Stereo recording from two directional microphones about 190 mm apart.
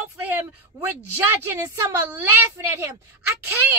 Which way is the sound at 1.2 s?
15° right (ahead or behind).